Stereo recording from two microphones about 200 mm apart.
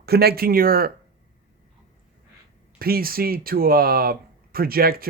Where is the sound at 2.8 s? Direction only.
50° right (ahead or behind).